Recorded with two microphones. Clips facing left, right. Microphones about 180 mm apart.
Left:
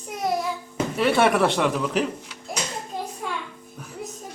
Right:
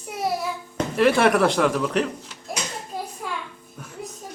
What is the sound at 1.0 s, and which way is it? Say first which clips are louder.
A man's voice: right 1 dB; centre (ahead or behind).